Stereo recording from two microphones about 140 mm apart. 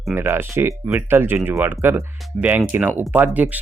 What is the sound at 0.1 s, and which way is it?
Speech, 15° right (ahead or behind).